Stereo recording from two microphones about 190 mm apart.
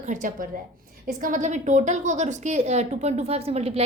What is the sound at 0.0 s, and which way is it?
A woman's voice, 40° right (ahead or behind).